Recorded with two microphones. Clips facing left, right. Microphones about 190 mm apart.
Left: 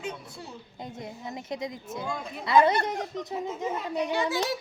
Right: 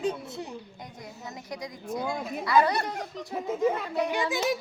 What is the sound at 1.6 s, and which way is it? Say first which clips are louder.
Speech: right 1 dB; 25° left (ahead or behind).